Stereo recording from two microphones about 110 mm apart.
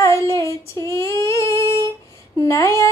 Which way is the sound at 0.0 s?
25° left (ahead or behind).